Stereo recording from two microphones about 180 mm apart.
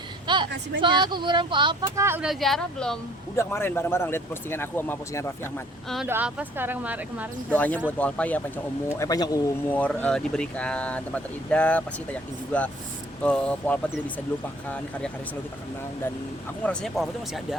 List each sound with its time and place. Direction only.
0.3 s vehicle: 25° right (ahead or behind)
0.8 s speech: 25° right (ahead or behind)
1.8 s speech: 15° right (ahead or behind)
2.2 s speech: centre (ahead or behind)
6.1 s speech: 10° right (ahead or behind)
7.5 s speech: 10° left (ahead or behind)
9.6 s speech: 10° left (ahead or behind)
16.6 s speech: centre (ahead or behind)